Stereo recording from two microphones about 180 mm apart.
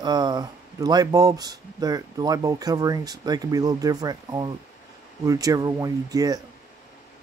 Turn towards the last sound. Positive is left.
turn(degrees=-20)  # may be behind; listen again after turning